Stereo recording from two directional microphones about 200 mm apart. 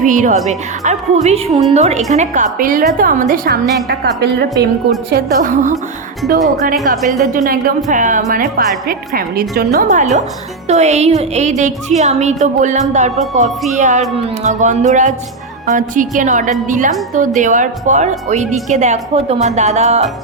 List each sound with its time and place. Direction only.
0.0 s a woman's voice: 40° right (ahead or behind)
5.1 s a woman's voice: 40° right (ahead or behind)
7.1 s a woman's voice: 40° right (ahead or behind)
9.7 s a woman's voice: 40° right (ahead or behind)